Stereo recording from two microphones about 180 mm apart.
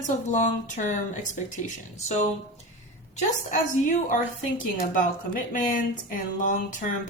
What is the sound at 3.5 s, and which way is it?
Speech, 45° left (ahead or behind).